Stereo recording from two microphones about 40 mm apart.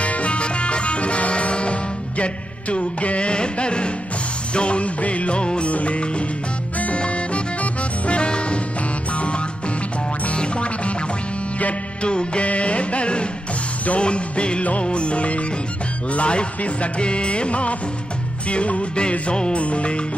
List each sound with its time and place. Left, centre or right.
0.0 s music: left
12.0 s music: left